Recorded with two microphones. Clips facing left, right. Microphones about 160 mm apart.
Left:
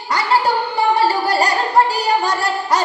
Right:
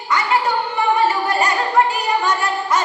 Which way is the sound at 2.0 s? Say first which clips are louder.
Left 1 dB; 35° left (ahead or behind).